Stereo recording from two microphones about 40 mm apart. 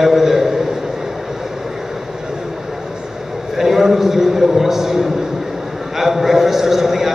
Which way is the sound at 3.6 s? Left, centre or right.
Centre.